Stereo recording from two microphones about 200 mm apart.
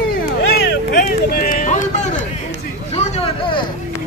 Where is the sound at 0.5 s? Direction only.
55° left (ahead or behind); by 3.6 s 25° left (ahead or behind).